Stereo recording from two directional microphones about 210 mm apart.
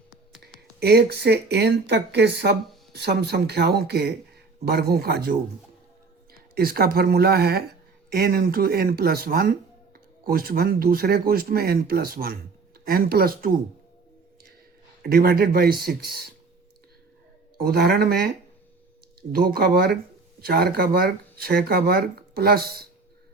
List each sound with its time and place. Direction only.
0.8 s speech: 50° right (ahead or behind)
6.5 s speech: 45° right (ahead or behind)
15.0 s speech: 45° right (ahead or behind)
17.6 s speech: 50° right (ahead or behind)
19.3 s speech: 45° right (ahead or behind)